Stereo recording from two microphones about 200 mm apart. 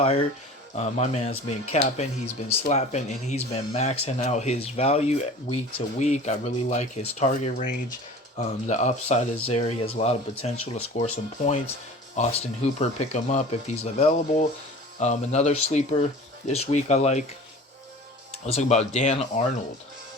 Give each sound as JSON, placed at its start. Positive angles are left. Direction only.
{"t": 0.0, "sound": "speech", "side_deg": 30}
{"t": 18.4, "sound": "speech", "side_deg": 35}